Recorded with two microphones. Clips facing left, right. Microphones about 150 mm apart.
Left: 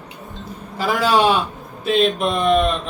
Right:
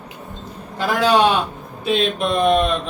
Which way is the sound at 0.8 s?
5° left (ahead or behind).